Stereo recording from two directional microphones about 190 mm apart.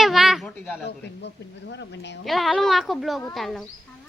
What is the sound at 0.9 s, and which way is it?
A woman's voice, 65° left (ahead or behind).